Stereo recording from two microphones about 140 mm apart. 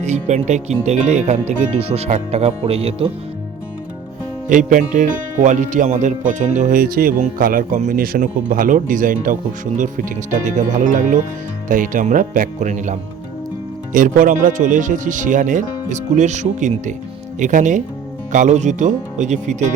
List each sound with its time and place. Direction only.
0.0 s speech: 55° right (ahead or behind)
4.4 s speech: 65° right (ahead or behind)
13.9 s speech: 70° right (ahead or behind)